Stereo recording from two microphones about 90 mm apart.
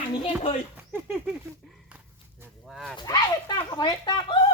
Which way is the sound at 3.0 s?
45° left (ahead or behind).